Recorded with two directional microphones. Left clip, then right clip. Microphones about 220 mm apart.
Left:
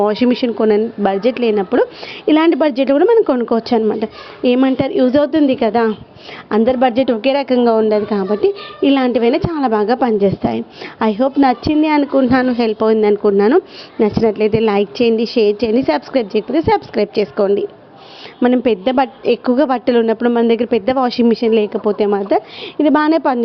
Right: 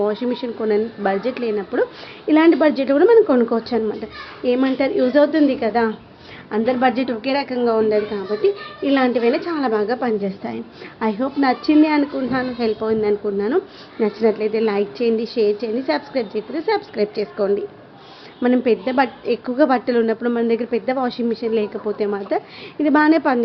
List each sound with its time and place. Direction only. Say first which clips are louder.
0.0 s a woman's voice: left 7 dB; 35° left (ahead or behind)